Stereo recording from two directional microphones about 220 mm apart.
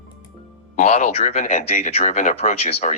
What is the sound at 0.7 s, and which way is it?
Speech, 30° left (ahead or behind).